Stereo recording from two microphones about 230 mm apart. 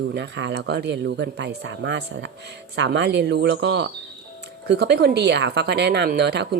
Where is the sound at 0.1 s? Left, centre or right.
Right.